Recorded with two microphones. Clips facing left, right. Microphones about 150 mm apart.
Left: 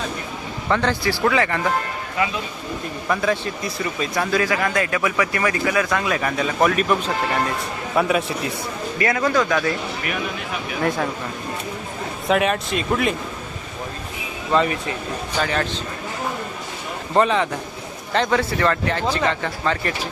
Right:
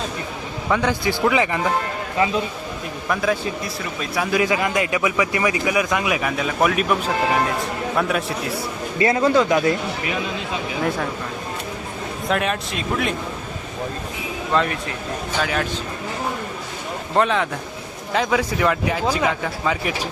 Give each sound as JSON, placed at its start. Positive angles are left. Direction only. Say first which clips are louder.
{"t": 0.7, "sound": "speech", "louder": "even", "side_deg": -10}
{"t": 3.1, "sound": "speech", "louder": "even", "side_deg": 0}
{"t": 4.4, "sound": "speech", "louder": "right 2 dB", "side_deg": -20}
{"t": 7.9, "sound": "speech", "louder": "left 4 dB", "side_deg": 0}
{"t": 9.0, "sound": "speech", "louder": "right 3 dB", "side_deg": -25}
{"t": 12.3, "sound": "speech", "louder": "left 4 dB", "side_deg": 0}
{"t": 14.5, "sound": "speech", "louder": "left 2 dB", "side_deg": 0}
{"t": 17.2, "sound": "speech", "louder": "left 1 dB", "side_deg": 0}